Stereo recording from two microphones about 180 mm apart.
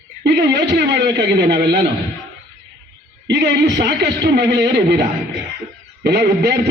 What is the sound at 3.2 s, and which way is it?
A man's voice, 70° right (ahead or behind).